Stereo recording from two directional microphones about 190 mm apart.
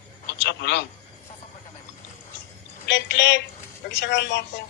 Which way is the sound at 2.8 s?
65° left (ahead or behind).